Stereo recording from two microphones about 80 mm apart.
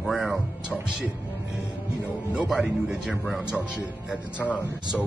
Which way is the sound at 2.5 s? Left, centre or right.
Centre.